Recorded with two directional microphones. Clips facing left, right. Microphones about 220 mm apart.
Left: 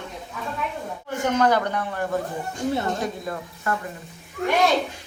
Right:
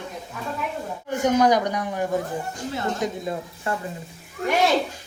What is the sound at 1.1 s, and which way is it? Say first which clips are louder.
Speech: right 2 dB; 15° right (ahead or behind).